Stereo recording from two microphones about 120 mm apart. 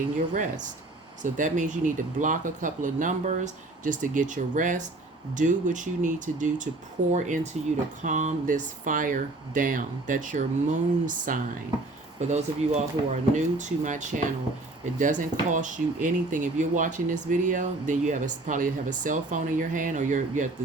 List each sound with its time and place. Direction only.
0.3 s speech: 90° right
7.1 s speech: 75° right (ahead or behind)
8.0 s speech: 90° right
12.3 s speech: 75° right (ahead or behind); by 20.5 s 90° right